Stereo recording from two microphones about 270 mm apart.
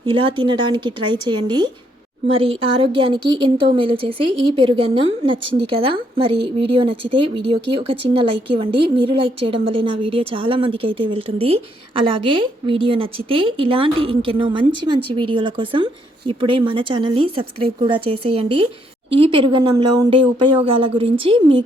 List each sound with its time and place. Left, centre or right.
0.0 s a woman's voice: centre